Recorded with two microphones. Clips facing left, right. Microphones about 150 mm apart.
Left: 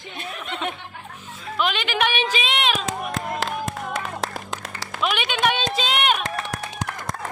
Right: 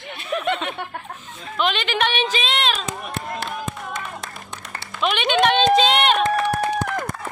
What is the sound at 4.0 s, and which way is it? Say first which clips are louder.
Run: left 4 dB; 90° left.